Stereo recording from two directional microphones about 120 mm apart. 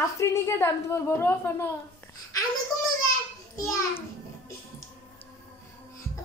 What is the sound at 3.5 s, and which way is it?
Speech, 25° left (ahead or behind).